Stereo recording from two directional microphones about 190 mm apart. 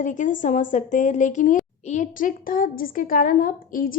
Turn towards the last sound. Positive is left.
turn(degrees=45)  # may be behind; listen again after turning